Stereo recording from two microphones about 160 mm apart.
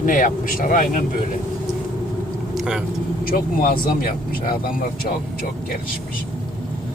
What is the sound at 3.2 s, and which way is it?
Speech, 65° left (ahead or behind).